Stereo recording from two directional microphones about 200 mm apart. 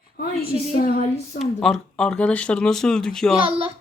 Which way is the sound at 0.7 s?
35° left (ahead or behind).